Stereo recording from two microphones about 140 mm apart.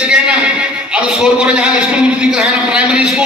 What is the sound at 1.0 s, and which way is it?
A man's voice, 5° right (ahead or behind).